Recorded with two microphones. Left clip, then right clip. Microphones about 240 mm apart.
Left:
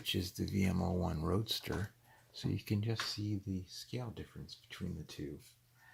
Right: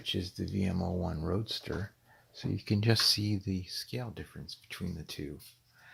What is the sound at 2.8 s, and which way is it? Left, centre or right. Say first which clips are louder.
Speech: right 12 dB; right.